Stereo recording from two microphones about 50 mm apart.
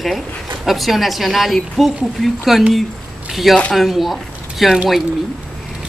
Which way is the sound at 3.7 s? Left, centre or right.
Centre.